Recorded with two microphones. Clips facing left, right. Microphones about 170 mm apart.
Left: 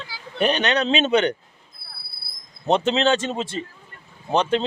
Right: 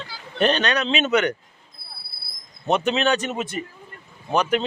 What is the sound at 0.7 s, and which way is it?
Speech, 30° left (ahead or behind).